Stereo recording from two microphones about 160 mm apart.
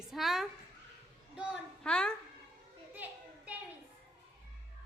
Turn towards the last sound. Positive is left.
turn(degrees=-10)  # may be behind; listen again after turning